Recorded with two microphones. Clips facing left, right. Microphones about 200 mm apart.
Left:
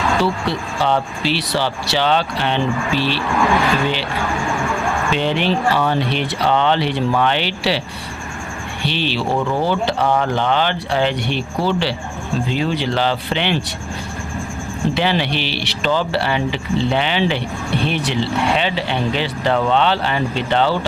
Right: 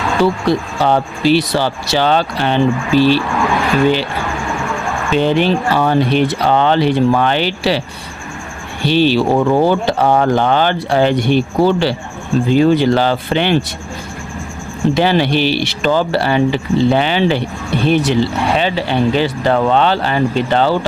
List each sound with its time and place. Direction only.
0.4 s speech: 45° right (ahead or behind)
5.1 s speech: 40° right (ahead or behind)
8.8 s speech: 40° right (ahead or behind)
14.9 s speech: 45° right (ahead or behind)